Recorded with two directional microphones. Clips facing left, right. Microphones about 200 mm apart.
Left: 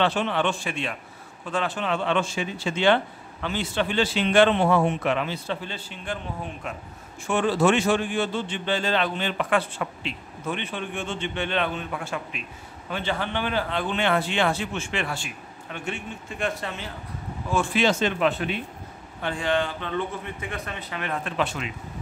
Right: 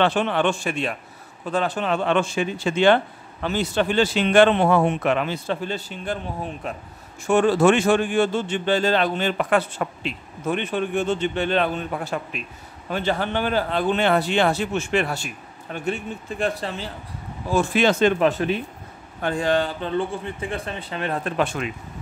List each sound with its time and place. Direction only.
0.0 s speech: 50° right (ahead or behind); by 6.8 s 35° right (ahead or behind)
7.2 s speech: 45° right (ahead or behind)
17.8 s speech: 55° right (ahead or behind)
19.2 s speech: 40° right (ahead or behind)